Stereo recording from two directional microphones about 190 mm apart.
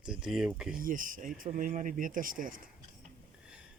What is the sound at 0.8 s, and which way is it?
Speech, 45° right (ahead or behind).